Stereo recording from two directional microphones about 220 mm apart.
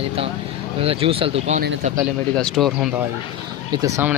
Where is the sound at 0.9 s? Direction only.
25° right (ahead or behind).